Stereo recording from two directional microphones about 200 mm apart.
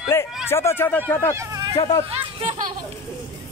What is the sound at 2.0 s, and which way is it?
Speech, 30° right (ahead or behind).